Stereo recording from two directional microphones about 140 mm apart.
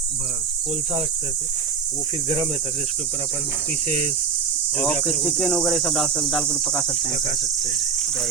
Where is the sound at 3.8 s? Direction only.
55° right (ahead or behind).